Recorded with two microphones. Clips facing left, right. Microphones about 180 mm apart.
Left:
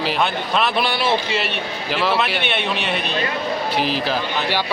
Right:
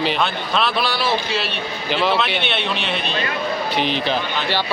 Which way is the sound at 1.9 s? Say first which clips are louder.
Right 1 dB; centre (ahead or behind).